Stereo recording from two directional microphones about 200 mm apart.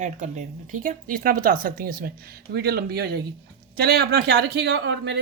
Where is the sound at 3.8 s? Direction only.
50° right (ahead or behind).